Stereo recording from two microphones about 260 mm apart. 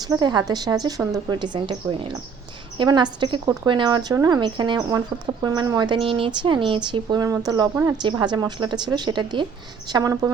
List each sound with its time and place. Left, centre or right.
0.0 s speech: centre